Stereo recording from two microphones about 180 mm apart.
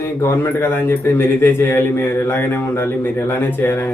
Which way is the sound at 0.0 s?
10° left (ahead or behind).